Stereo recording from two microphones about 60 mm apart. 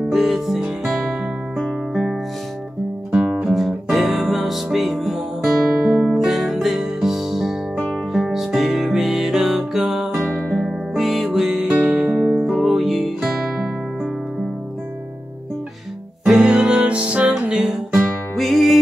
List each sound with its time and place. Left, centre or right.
0.1 s music: centre
3.1 s music: centre
3.4 s music: centre
16.3 s music: centre
18.3 s music: centre